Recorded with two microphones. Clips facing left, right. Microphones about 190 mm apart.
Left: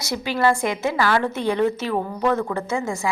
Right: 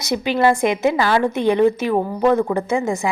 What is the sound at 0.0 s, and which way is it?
A woman's voice, 20° right (ahead or behind).